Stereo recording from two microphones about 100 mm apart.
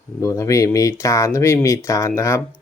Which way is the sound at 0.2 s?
30° left (ahead or behind).